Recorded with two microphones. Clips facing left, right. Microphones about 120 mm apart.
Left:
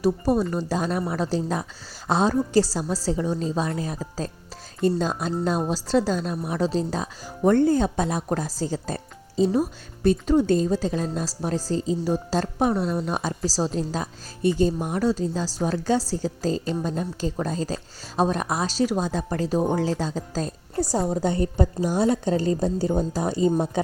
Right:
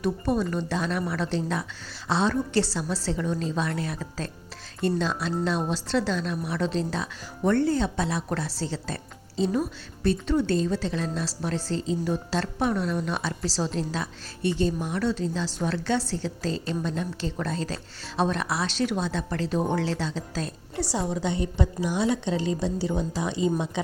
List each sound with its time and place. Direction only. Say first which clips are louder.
0.0 s a woman's voice: left 4 dB; 40° left (ahead or behind)